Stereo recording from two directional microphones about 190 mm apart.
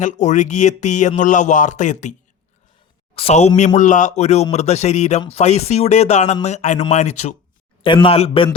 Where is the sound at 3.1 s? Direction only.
35° left (ahead or behind).